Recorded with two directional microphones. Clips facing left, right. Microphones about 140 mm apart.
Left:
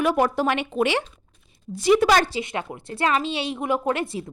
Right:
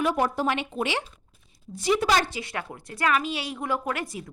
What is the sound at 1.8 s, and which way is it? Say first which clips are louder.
Speech: left 5 dB; 90° left.